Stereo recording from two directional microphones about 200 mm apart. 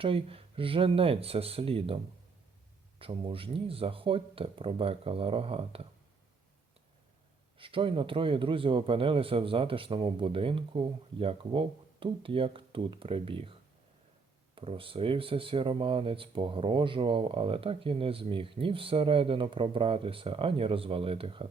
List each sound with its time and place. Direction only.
0.0 s speech: 25° right (ahead or behind)
3.0 s speech: 25° right (ahead or behind)
7.6 s speech: 25° right (ahead or behind)